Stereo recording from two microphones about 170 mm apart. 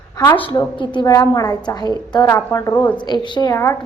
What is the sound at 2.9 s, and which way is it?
Speech, 25° left (ahead or behind).